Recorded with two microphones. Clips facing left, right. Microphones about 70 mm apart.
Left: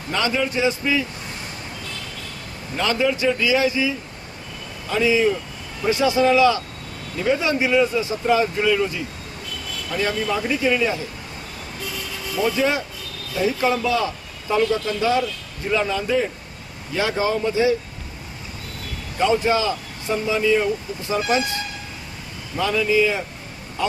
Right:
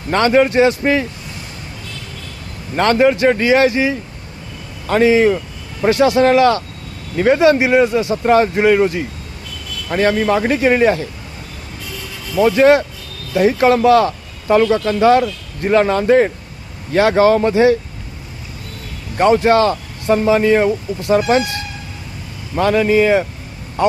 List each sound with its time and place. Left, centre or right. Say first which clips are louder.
0.1 s speech: right 10 dB; right
2.7 s speech: right 8 dB; right
12.4 s speech: right 10 dB; right
19.1 s speech: right 7 dB; right
22.5 s speech: right 6 dB; right